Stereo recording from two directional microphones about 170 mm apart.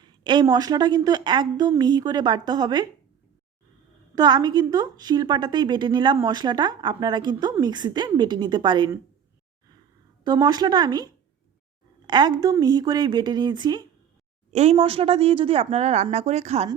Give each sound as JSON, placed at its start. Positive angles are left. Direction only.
{"t": 0.0, "sound": "a woman's voice", "side_deg": -25}
{"t": 4.1, "sound": "a woman's voice", "side_deg": -25}
{"t": 10.2, "sound": "a woman's voice", "side_deg": -25}
{"t": 14.5, "sound": "speech", "side_deg": -40}